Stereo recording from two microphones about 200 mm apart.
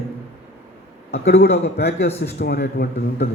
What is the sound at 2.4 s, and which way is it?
Speech, 50° left (ahead or behind).